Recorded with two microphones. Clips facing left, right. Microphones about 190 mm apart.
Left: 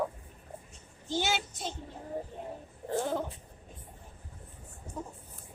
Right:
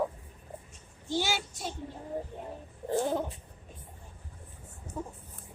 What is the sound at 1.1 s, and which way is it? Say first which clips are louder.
Speech: even; 20° left (ahead or behind).